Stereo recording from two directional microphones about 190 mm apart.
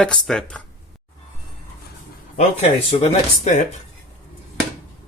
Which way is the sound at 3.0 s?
35° left (ahead or behind).